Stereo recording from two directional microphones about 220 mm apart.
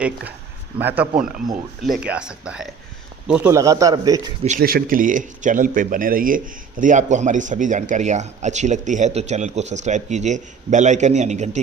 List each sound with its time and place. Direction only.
0.8 s a man's voice: 10° right (ahead or behind)
4.4 s speech: 40° right (ahead or behind)